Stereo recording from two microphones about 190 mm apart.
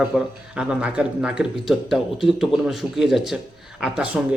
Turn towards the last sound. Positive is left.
turn(degrees=-5)  # may be behind; listen again after turning